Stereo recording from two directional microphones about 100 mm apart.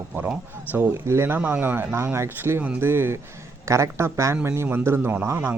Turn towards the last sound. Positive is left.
turn(degrees=-20)  # may be behind; listen again after turning